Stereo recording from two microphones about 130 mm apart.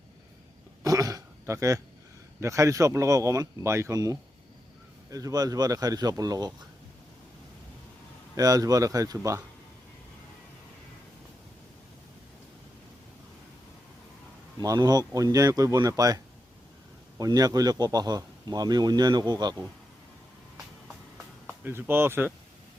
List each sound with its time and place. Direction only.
0.8 s throat clearing: 25° right (ahead or behind)
2.4 s speech: 25° right (ahead or behind)
8.4 s speech: 30° right (ahead or behind)
14.6 s a man's voice: 30° right (ahead or behind)
21.4 s speech: 15° right (ahead or behind)